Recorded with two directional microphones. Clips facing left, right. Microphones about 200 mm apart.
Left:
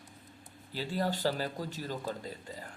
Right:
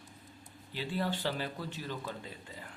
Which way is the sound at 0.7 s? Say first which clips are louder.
Left 2 dB; 40° left (ahead or behind).